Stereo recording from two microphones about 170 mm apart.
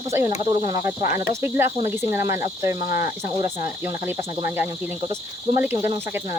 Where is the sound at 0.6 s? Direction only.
20° right (ahead or behind).